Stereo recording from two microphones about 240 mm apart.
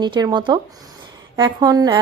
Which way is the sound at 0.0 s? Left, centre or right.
Centre.